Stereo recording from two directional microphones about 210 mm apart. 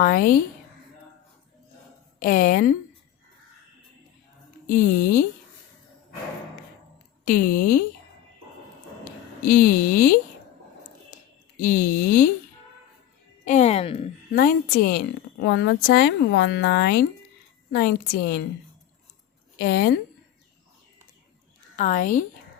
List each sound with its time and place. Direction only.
0.0 s speech: 40° left (ahead or behind)
2.1 s speech: 40° left (ahead or behind)
4.6 s speech: 40° left (ahead or behind)
7.3 s speech: 40° left (ahead or behind)
9.5 s speech: 40° left (ahead or behind)
11.6 s speech: 40° left (ahead or behind)
13.4 s speech: 35° left (ahead or behind)
14.3 s speech: 45° left (ahead or behind)
19.5 s speech: 50° left (ahead or behind)
21.8 s speech: 40° left (ahead or behind)